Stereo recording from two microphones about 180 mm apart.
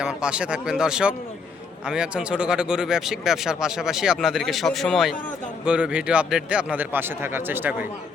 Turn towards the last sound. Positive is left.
turn(degrees=-10)  # may be behind; listen again after turning